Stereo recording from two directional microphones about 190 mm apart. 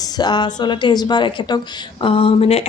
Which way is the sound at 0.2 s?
20° left (ahead or behind).